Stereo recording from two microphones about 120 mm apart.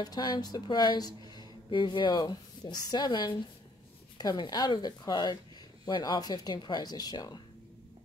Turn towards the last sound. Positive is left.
turn(degrees=35)  # may be behind; listen again after turning